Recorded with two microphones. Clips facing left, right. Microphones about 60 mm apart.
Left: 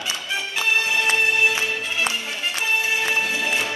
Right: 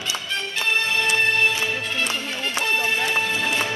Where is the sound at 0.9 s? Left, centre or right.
Centre.